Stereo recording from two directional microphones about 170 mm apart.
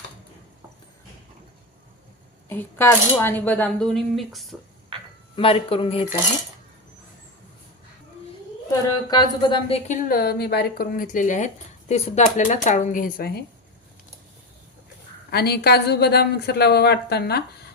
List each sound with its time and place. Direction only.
2.5 s speech: 15° left (ahead or behind)
5.4 s speech: 35° left (ahead or behind)
9.0 s speech: 25° left (ahead or behind)
10.0 s speech: 60° left (ahead or behind)
15.3 s speech: 70° left (ahead or behind)